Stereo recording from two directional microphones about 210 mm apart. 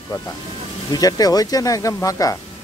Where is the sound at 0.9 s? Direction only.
15° left (ahead or behind).